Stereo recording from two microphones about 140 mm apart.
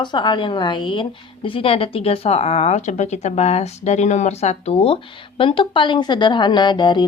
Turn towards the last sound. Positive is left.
turn(degrees=35)  # may be behind; listen again after turning